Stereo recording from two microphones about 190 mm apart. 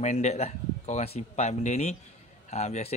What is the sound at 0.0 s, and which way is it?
Speech, 35° left (ahead or behind).